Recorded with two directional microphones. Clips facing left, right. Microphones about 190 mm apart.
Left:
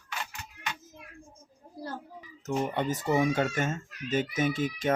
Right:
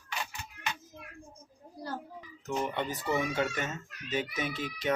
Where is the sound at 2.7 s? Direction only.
45° left (ahead or behind).